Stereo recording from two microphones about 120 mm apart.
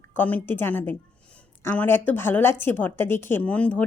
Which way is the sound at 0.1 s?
15° left (ahead or behind).